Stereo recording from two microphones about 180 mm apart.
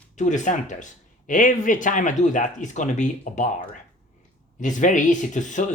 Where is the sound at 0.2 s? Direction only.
45° left (ahead or behind).